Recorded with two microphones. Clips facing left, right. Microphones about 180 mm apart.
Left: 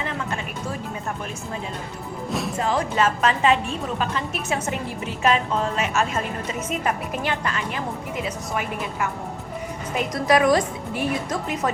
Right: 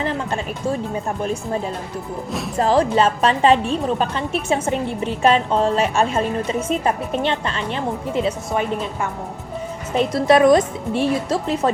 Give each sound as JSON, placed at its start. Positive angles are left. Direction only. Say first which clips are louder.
{"t": 0.0, "sound": "music", "louder": "right 5 dB", "side_deg": -30}
{"t": 2.6, "sound": "a woman's voice", "louder": "right 7 dB", "side_deg": -35}
{"t": 9.9, "sound": "a woman's voice", "louder": "right 5 dB", "side_deg": -30}